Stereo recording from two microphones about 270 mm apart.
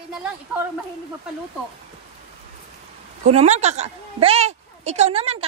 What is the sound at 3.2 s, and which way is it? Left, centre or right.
A woman's voice, right.